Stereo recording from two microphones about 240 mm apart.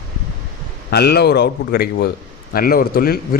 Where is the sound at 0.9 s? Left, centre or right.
Left.